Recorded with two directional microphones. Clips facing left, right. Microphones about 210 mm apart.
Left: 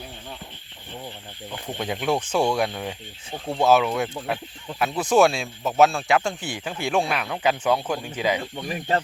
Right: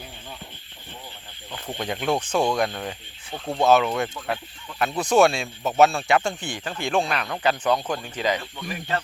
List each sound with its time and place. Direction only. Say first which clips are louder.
1.8 s speech: even; 5° left (ahead or behind)
8.4 s speech: left 3 dB; 25° left (ahead or behind)